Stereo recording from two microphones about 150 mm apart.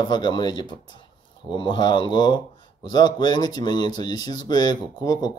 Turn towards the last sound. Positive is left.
turn(degrees=25)  # may be behind; listen again after turning